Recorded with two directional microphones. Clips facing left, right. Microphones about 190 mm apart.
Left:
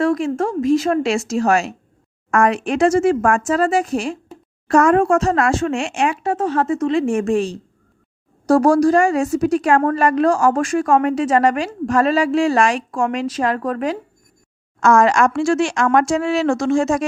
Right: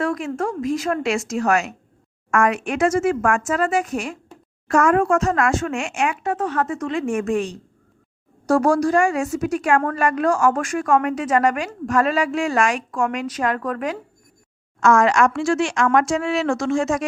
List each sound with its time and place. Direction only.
0.0 s a woman's voice: 25° left (ahead or behind)